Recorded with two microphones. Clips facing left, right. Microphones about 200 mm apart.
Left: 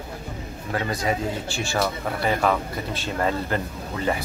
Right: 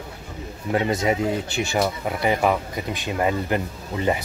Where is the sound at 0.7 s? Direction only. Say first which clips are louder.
Right 4 dB; 20° right (ahead or behind).